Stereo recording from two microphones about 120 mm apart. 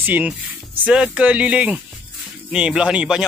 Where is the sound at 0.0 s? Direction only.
15° right (ahead or behind).